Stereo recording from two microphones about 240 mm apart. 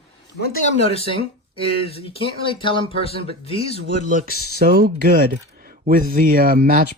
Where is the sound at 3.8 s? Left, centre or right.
Right.